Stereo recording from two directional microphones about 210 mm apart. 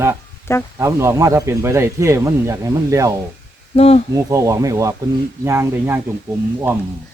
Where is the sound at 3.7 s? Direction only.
30° left (ahead or behind).